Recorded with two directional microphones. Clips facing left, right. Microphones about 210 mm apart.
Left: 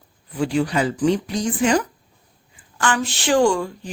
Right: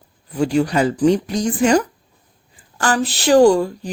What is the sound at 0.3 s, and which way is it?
Speech, 40° right (ahead or behind).